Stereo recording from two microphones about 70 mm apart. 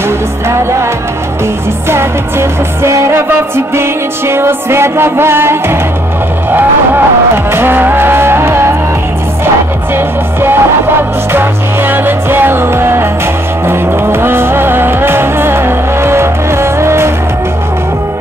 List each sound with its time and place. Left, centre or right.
0.5 s music: right
1.9 s music: right
7.5 s music: right
9.9 s music: right